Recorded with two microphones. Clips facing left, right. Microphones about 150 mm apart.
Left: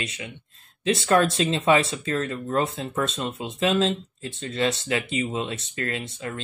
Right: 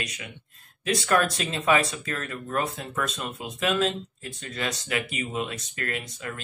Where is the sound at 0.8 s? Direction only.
25° left (ahead or behind).